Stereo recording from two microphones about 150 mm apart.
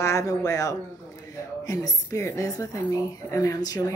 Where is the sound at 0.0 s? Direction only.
20° left (ahead or behind).